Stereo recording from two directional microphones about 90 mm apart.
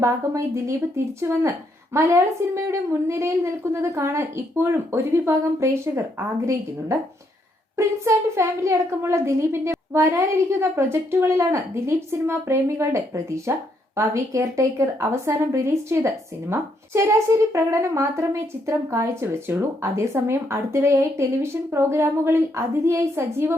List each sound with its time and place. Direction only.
0.0 s a woman's voice: 30° right (ahead or behind)